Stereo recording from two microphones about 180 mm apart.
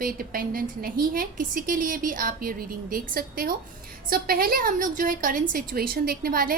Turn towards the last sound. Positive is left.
turn(degrees=-55)  # may be behind; listen again after turning